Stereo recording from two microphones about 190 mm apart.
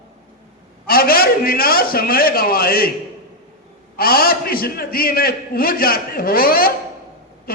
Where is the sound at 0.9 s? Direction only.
50° left (ahead or behind).